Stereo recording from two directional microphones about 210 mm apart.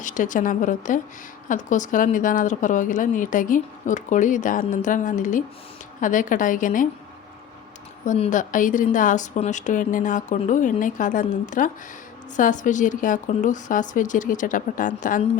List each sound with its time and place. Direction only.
0.0 s a woman's voice: 35° left (ahead or behind)
8.0 s a woman's voice: 35° left (ahead or behind)